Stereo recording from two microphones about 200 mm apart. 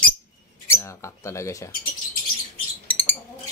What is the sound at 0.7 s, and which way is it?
Mouse, 15° left (ahead or behind).